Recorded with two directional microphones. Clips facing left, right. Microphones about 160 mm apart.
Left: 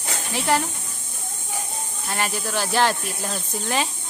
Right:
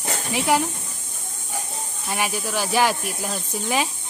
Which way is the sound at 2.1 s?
10° right (ahead or behind).